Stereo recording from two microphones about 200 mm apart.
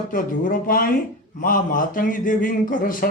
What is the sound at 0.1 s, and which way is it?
Speech, 45° left (ahead or behind).